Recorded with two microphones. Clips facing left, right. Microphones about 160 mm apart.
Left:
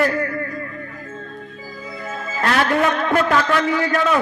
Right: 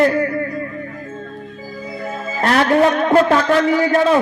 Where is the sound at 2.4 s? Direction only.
30° right (ahead or behind).